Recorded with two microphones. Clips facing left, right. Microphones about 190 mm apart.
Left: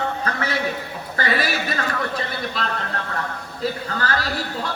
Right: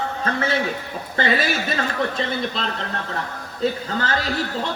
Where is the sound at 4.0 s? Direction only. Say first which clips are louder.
Right 1 dB; 20° right (ahead or behind).